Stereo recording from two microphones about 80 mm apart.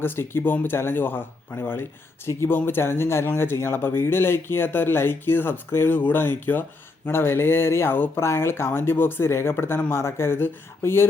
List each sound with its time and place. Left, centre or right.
0.0 s speech: left